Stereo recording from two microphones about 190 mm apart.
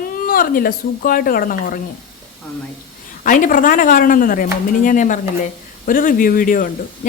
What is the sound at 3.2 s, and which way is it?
Speech, 45° left (ahead or behind).